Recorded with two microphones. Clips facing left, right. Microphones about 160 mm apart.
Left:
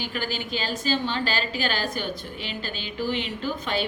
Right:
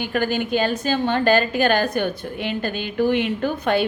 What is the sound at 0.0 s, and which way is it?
A woman's voice, 55° right (ahead or behind).